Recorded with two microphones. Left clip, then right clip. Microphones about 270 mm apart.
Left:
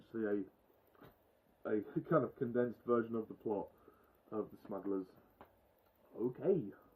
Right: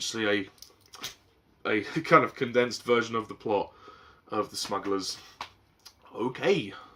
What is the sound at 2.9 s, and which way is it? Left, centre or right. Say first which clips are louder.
Speech: right 10 dB; centre.